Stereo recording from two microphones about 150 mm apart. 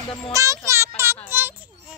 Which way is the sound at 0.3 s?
20° right (ahead or behind).